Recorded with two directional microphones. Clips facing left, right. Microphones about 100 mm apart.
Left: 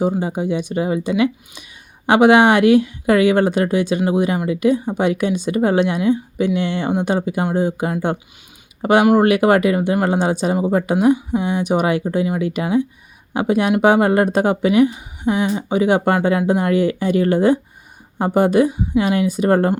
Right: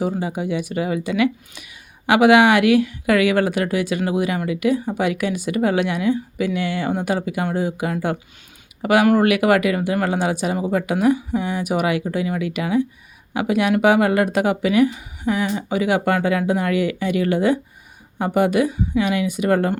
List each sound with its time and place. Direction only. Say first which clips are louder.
0.0 s speech: left 4 dB; 30° left (ahead or behind)